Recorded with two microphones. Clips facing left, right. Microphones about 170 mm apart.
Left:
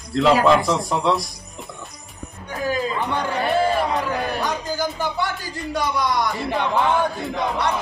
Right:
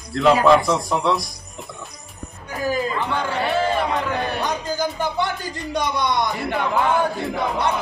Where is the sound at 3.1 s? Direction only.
10° left (ahead or behind).